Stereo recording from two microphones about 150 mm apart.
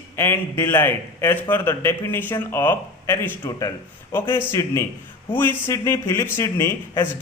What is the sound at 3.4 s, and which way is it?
Speech, 25° left (ahead or behind).